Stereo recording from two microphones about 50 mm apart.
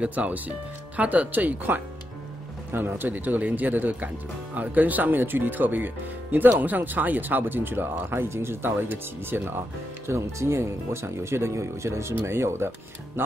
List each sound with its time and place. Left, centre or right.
0.0 s speech: right
2.7 s speech: right
10.0 s speech: right